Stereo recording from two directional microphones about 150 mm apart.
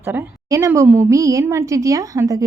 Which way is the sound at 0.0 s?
15° right (ahead or behind).